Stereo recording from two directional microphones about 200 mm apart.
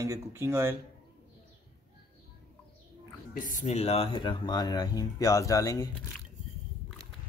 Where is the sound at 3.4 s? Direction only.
35° left (ahead or behind); by 5.8 s 15° left (ahead or behind).